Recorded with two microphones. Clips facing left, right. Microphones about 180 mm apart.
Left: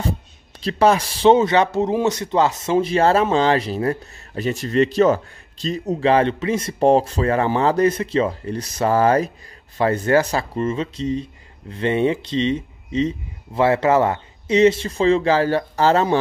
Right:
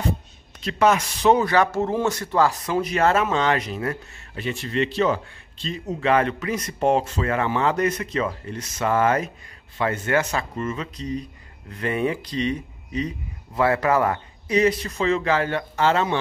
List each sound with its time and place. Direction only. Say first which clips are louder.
0.6 s speech: left 3 dB; 35° left (ahead or behind)